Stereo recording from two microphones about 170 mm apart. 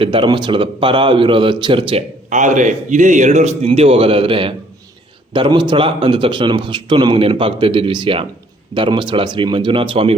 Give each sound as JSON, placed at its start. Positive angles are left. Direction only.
{"t": 0.0, "sound": "speech", "side_deg": -30}
{"t": 2.3, "sound": "a man's voice", "side_deg": -45}